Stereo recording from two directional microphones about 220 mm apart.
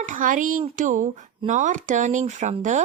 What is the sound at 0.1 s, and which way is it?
Speech, 35° right (ahead or behind).